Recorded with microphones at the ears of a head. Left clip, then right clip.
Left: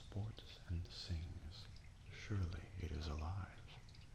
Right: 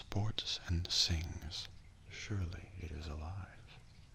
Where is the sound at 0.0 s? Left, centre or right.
Right.